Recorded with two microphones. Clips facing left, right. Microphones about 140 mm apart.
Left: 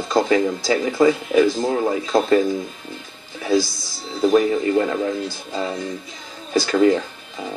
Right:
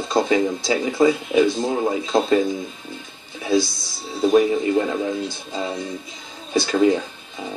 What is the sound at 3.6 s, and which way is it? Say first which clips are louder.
Speech: even; centre (ahead or behind).